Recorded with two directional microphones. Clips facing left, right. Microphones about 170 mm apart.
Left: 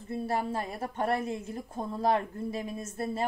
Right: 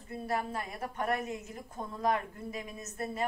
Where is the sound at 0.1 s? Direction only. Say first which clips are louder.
Left 4 dB; 30° left (ahead or behind).